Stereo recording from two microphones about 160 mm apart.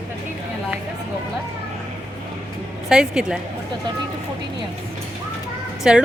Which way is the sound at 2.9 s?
5° right (ahead or behind).